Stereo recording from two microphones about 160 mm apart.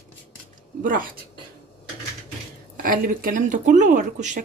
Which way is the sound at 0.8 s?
60° right (ahead or behind).